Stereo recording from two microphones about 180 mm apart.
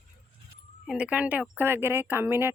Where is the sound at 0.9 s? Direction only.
5° right (ahead or behind).